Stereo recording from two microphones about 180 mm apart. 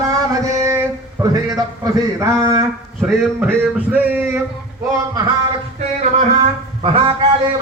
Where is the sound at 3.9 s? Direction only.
10° right (ahead or behind).